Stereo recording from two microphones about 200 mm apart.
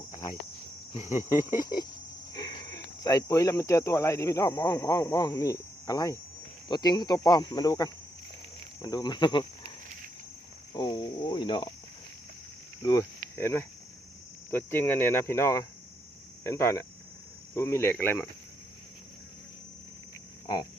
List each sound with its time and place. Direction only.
1.1 s speech: 15° left (ahead or behind)
10.8 s speech: 20° left (ahead or behind)
12.8 s speech: 15° left (ahead or behind)